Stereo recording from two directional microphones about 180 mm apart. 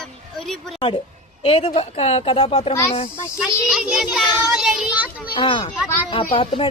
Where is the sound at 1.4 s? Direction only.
30° left (ahead or behind).